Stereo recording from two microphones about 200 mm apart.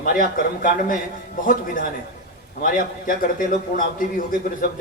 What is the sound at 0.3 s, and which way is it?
A man's voice, 40° left (ahead or behind).